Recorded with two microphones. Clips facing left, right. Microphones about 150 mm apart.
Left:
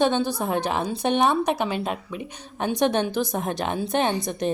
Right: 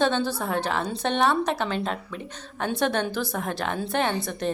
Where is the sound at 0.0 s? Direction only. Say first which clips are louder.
Left 2 dB; 15° left (ahead or behind).